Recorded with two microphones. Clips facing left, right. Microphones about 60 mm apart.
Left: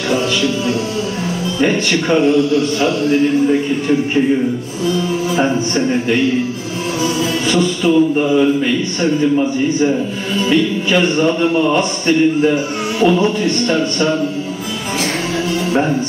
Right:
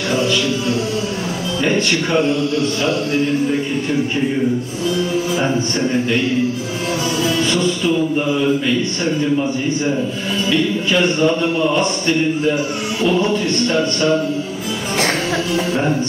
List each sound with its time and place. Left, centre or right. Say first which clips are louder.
13.0 s music: left 3 dB; left